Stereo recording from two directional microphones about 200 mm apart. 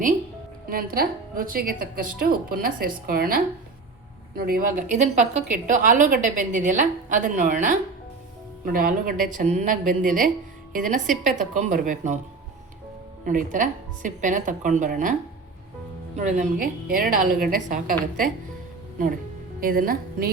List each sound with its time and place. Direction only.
0.7 s a woman's voice: 50° right (ahead or behind)
13.2 s a woman's voice: 40° right (ahead or behind)
16.1 s speech: 35° right (ahead or behind)
19.5 s a woman's voice: 45° right (ahead or behind)